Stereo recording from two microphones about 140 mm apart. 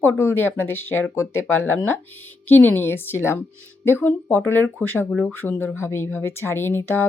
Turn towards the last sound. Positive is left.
turn(degrees=15)  # may be behind; listen again after turning